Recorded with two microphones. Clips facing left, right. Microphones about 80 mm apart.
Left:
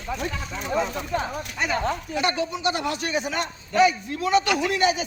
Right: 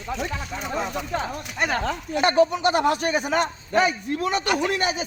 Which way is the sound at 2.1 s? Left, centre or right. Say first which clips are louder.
Right 11 dB; right.